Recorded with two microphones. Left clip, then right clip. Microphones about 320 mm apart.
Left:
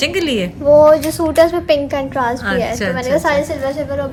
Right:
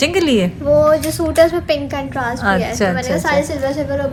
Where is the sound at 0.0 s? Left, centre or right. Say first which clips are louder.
Right 2 dB; centre.